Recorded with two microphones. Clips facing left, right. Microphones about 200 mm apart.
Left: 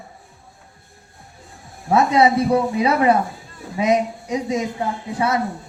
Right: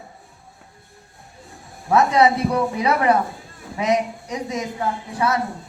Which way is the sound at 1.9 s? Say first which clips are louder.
Left 1 dB; 25° left (ahead or behind).